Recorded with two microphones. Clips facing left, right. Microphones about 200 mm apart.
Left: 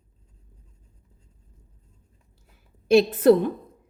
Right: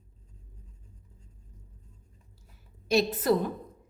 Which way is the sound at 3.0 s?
60° left (ahead or behind).